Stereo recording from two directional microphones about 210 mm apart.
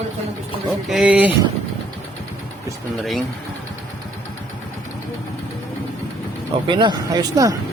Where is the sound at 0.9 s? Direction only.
5° right (ahead or behind).